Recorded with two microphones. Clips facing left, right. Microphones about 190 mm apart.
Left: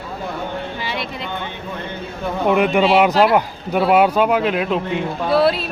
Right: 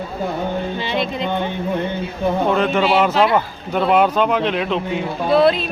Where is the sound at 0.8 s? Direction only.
25° right (ahead or behind).